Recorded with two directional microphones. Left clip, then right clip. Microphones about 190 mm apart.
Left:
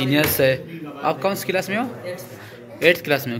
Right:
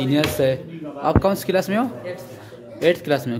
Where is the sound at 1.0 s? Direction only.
30° right (ahead or behind).